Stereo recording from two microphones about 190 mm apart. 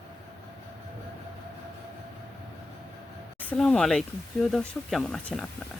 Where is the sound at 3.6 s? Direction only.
5° left (ahead or behind).